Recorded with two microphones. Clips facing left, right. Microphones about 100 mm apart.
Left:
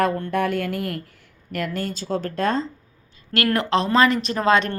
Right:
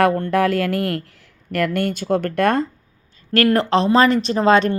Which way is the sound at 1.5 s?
75° right (ahead or behind).